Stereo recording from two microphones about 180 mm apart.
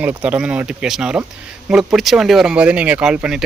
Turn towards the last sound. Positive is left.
turn(degrees=-5)  # may be behind; listen again after turning